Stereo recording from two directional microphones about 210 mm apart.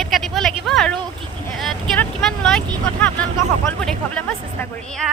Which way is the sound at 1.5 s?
Centre (ahead or behind).